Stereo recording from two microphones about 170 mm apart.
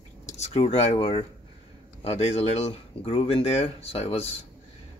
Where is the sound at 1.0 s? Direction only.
25° left (ahead or behind).